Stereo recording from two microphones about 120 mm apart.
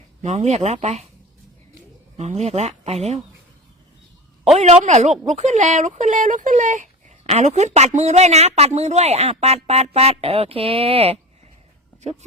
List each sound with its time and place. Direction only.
0.2 s speech: 70° right (ahead or behind)
2.1 s a woman's voice: 65° right (ahead or behind)
4.5 s speech: 65° right (ahead or behind); by 6.8 s 90° right
7.3 s a woman's voice: 70° right (ahead or behind)